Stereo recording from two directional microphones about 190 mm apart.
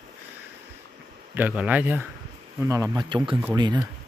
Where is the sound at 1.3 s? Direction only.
10° right (ahead or behind).